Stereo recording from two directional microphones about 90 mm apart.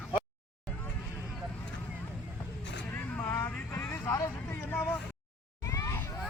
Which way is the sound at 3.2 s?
30° left (ahead or behind).